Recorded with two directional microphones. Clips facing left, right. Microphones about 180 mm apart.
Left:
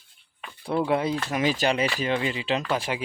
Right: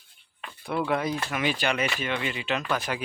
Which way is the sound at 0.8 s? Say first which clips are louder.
Left 3 dB; 25° left (ahead or behind).